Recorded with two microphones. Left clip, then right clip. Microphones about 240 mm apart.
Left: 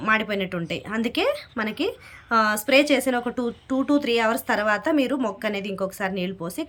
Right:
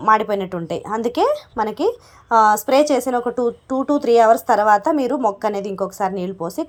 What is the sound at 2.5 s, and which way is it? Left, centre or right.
Speech, centre.